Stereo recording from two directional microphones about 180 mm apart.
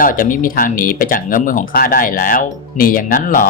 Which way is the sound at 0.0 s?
50° left (ahead or behind).